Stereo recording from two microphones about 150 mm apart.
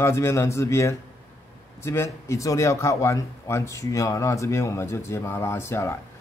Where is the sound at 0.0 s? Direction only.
20° left (ahead or behind).